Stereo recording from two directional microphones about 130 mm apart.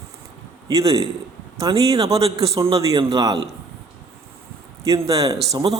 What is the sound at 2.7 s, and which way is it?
Speech, 25° right (ahead or behind).